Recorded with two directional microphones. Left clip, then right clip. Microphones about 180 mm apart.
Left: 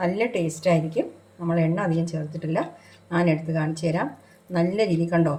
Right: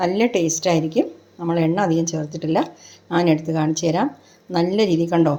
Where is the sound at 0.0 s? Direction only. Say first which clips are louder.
Right 5 dB; 40° right (ahead or behind).